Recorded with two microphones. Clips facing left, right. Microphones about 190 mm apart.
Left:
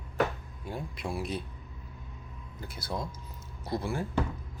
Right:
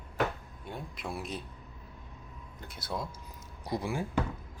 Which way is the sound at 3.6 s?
15° right (ahead or behind).